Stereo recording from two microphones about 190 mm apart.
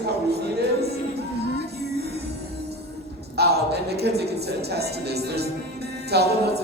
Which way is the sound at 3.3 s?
60° right (ahead or behind).